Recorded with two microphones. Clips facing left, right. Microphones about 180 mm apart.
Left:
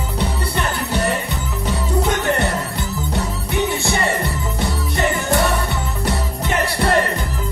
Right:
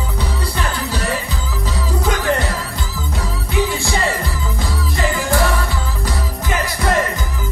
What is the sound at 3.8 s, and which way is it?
Music, 60° left (ahead or behind).